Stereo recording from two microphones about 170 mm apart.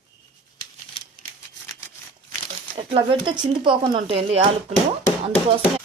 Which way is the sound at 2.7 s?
30° right (ahead or behind).